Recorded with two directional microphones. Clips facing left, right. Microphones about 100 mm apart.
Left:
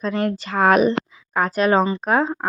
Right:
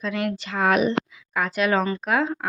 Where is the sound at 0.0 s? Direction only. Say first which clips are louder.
Left 4 dB; 35° left (ahead or behind).